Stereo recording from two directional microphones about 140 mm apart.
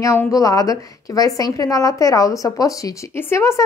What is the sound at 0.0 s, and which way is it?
Speech, 20° left (ahead or behind).